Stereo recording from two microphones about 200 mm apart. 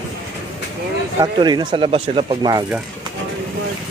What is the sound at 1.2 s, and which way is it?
Speech, 20° right (ahead or behind).